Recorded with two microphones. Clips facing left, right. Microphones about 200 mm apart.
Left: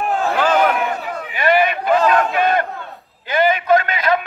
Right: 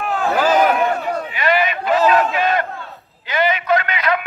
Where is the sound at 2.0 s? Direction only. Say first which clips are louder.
Right 1 dB; 5° right (ahead or behind).